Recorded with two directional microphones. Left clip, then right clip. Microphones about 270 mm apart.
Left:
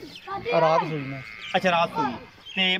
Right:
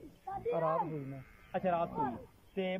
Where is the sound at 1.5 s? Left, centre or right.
Right.